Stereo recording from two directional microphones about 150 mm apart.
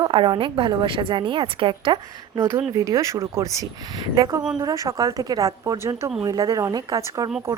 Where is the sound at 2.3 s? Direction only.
20° right (ahead or behind).